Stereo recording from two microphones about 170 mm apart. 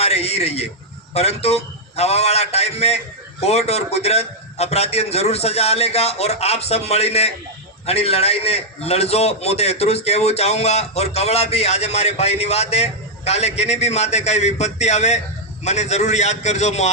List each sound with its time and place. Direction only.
0.0 s a man's voice: 40° left (ahead or behind)